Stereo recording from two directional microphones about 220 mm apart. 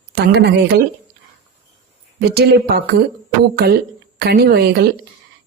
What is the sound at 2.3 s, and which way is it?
Speech, 45° right (ahead or behind).